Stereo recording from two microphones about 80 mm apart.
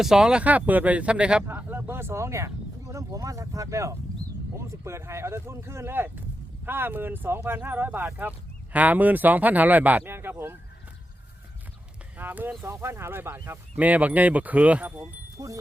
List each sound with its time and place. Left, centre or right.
0.0 s speech: centre
1.5 s speech: right
12.1 s speech: right
12.6 s speech: right; by 14.9 s centre
15.4 s speech: right